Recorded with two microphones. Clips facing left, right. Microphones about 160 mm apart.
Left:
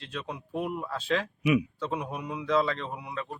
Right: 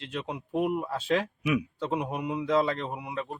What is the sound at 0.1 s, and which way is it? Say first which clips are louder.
Speech: right 3 dB; 20° right (ahead or behind).